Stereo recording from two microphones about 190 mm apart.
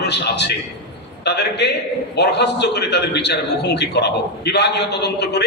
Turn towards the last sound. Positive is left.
turn(degrees=60)  # may be behind; listen again after turning